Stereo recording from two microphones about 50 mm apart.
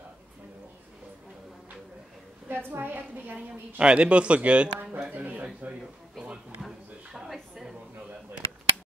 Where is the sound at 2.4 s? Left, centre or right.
Right.